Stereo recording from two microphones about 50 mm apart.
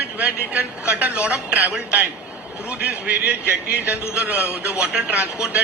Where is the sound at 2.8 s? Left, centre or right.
Right.